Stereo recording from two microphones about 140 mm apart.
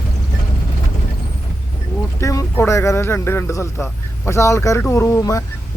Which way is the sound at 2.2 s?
20° left (ahead or behind).